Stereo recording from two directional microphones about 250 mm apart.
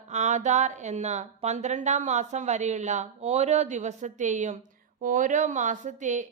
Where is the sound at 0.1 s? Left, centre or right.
Right.